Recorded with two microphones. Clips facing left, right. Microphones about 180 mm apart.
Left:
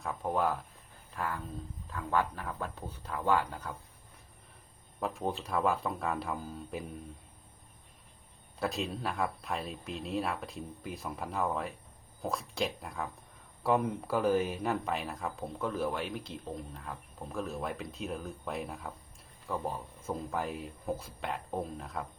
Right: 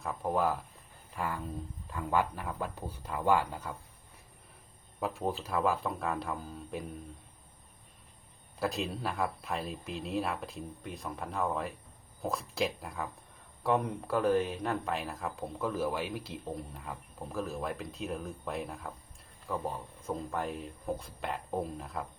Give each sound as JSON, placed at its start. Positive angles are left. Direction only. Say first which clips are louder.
{"t": 0.0, "sound": "speech", "louder": "right 1 dB", "side_deg": 0}
{"t": 4.9, "sound": "speech", "louder": "right 1 dB", "side_deg": 0}
{"t": 8.5, "sound": "speech", "louder": "right 1 dB", "side_deg": 0}